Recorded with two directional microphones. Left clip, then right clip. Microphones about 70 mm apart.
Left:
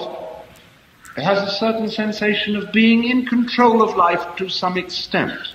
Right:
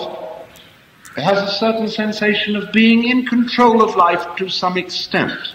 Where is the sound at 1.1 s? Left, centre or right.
Left.